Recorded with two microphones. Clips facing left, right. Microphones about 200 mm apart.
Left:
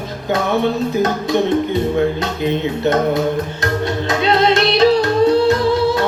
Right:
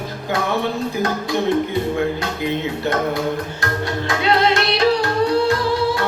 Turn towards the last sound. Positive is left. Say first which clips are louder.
# left 4 dB
turn(degrees=20)  # may be behind; listen again after turning